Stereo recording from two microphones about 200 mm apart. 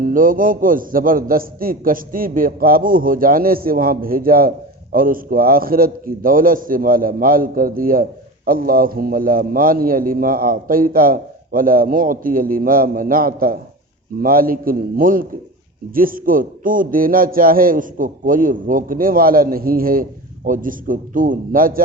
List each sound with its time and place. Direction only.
0.0 s a man's voice: 45° right (ahead or behind)